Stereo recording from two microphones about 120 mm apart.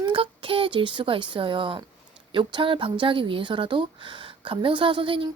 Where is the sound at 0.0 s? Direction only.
45° right (ahead or behind).